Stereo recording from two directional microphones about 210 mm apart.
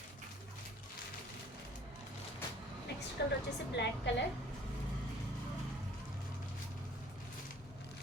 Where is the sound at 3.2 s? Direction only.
50° left (ahead or behind).